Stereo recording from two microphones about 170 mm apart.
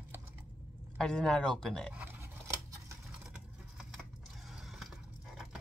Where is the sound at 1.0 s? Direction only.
5° left (ahead or behind).